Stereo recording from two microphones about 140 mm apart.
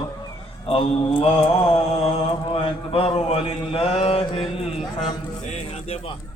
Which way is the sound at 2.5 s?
45° left (ahead or behind).